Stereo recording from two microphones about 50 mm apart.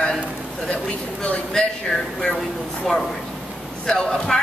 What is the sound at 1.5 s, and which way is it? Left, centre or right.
Speech, centre.